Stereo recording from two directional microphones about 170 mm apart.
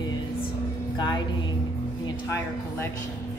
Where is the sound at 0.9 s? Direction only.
25° left (ahead or behind).